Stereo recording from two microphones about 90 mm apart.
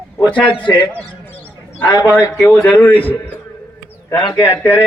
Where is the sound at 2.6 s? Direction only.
20° left (ahead or behind).